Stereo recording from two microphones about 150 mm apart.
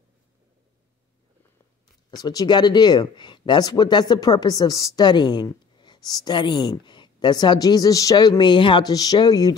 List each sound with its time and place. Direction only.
2.0 s speech: 25° left (ahead or behind)